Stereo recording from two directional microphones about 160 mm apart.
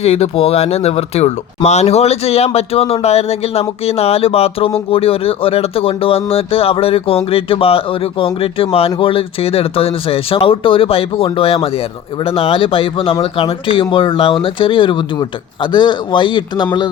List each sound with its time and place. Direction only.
0.0 s speech: 40° left (ahead or behind)